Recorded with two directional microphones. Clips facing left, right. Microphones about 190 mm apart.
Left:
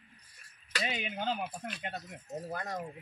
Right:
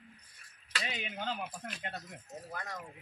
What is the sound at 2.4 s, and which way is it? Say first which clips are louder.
Speech: left 5 dB; 40° left (ahead or behind).